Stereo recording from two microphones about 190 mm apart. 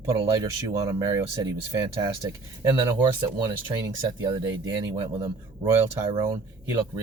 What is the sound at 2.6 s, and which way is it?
Speech, 15° right (ahead or behind).